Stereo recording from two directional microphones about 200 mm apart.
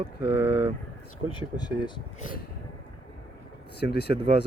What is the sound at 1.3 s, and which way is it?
Speech, 20° left (ahead or behind).